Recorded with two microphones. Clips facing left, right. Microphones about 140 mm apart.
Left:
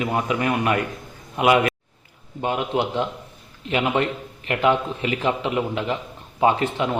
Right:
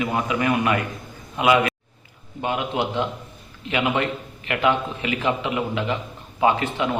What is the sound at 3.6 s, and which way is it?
A man's voice, 40° left (ahead or behind).